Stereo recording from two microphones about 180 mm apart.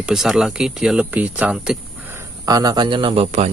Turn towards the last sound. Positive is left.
turn(degrees=-30)  # may be behind; listen again after turning